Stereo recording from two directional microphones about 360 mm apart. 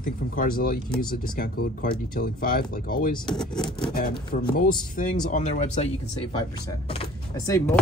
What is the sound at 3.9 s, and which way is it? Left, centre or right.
Speech, left.